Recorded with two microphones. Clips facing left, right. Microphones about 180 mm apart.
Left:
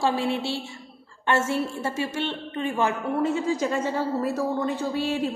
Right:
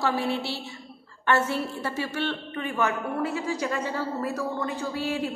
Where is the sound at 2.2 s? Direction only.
25° left (ahead or behind).